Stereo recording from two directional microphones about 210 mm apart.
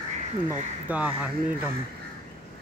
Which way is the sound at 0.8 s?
5° right (ahead or behind).